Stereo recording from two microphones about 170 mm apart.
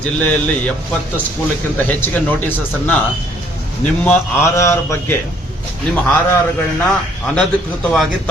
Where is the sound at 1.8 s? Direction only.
10° left (ahead or behind).